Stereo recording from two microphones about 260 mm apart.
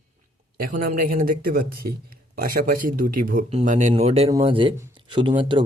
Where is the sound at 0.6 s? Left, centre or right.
Right.